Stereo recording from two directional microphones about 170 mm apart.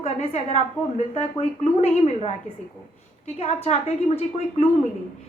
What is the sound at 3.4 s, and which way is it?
A woman's voice, 40° left (ahead or behind).